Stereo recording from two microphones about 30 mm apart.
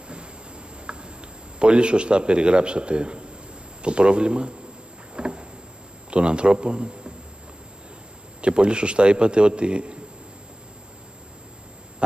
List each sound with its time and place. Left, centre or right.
0.8 s tick-tock: right
1.6 s a man's voice: right
5.1 s rowboat: right
6.0 s a man's voice: right
8.4 s a man's voice: right